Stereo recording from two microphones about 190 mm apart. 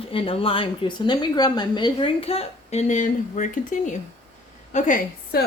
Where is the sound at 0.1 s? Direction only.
30° left (ahead or behind).